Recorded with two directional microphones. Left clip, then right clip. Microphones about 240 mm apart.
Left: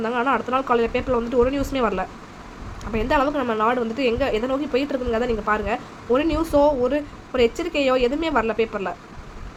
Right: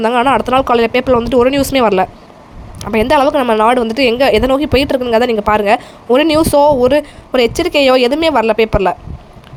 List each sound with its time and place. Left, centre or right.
0.0 s a woman's voice: right